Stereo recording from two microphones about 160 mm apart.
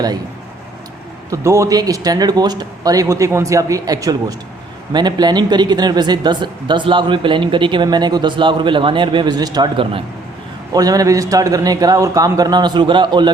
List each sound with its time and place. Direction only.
1.3 s speech: 20° right (ahead or behind)